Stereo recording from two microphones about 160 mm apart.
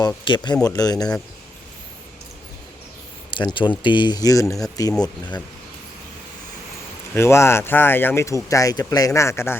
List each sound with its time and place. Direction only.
0.3 s speech: 30° left (ahead or behind)
3.3 s speech: 30° left (ahead or behind)
7.1 s speech: 15° left (ahead or behind)